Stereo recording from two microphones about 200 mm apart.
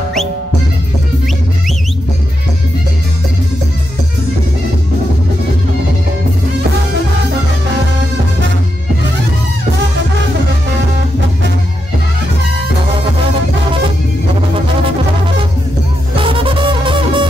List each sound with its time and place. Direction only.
16.2 s music: 25° right (ahead or behind)